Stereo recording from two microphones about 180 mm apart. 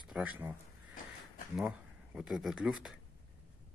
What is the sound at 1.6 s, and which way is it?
Speech, 5° right (ahead or behind).